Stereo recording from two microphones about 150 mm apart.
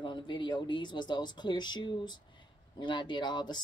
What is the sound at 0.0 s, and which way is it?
A woman's voice, 30° left (ahead or behind).